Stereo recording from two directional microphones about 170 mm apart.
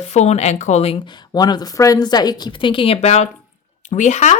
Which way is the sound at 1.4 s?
25° left (ahead or behind).